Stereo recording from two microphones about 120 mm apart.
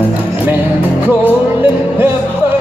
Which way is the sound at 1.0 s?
15° right (ahead or behind).